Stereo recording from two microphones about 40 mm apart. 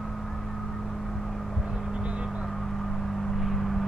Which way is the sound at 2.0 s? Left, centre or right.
Right.